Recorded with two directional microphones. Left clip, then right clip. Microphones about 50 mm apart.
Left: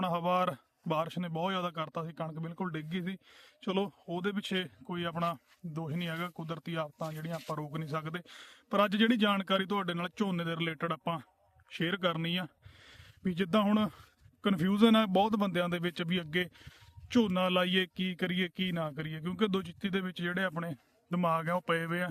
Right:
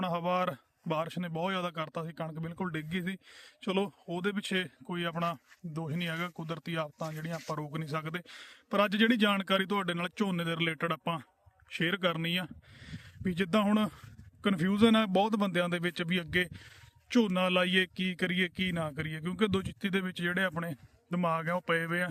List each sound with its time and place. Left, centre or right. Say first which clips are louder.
0.0 s speech: left 1 dB; centre
1.5 s speech: even; right
2.4 s speech: right 1 dB; right
8.4 s a man's voice: even; centre
9.4 s speech: right 1 dB; right
10.4 s speech: right 3 dB; right; by 13.3 s centre
13.3 s speech: even; right
14.5 s speech: even; centre
15.1 s speech: even; centre
15.4 s speech: right 1 dB; right
18.8 s speech: right 1 dB; right
19.8 s speech: right 2 dB; right
21.1 s speech: even; centre
21.8 s a man's voice: right 2 dB; centre